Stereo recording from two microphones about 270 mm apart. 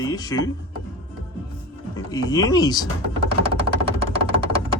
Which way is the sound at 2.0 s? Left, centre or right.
Centre.